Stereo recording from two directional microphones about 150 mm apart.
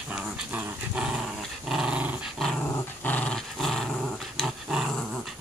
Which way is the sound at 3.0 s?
10° left (ahead or behind).